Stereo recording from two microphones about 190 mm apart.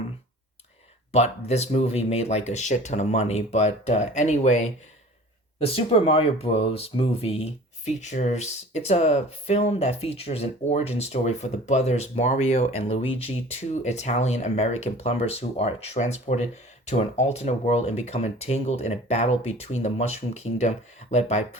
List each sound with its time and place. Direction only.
1.1 s speech: 35° left (ahead or behind)